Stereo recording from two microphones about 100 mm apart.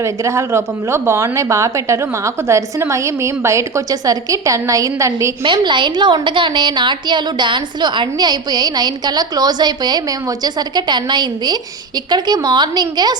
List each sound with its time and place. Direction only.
0.0 s a woman's voice: 30° right (ahead or behind)
5.4 s a woman's voice: 55° right (ahead or behind)